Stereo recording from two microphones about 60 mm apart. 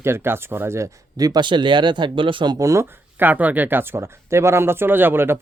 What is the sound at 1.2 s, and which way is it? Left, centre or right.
Speech, right.